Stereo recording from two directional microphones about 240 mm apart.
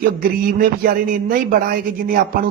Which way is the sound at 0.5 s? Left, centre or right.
Right.